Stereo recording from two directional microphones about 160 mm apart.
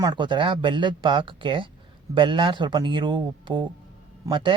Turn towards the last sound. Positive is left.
turn(degrees=-30)  # may be behind; listen again after turning